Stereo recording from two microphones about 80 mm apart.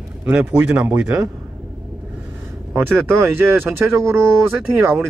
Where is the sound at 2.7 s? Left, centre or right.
Right.